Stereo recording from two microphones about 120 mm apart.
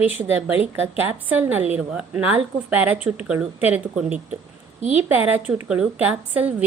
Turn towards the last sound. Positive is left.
turn(degrees=-10)  # may be behind; listen again after turning